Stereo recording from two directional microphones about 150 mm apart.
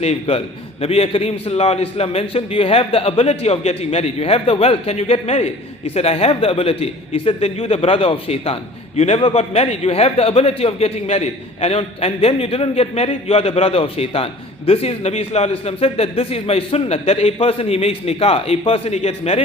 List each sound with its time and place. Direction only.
0.0 s a man's voice: 45° left (ahead or behind)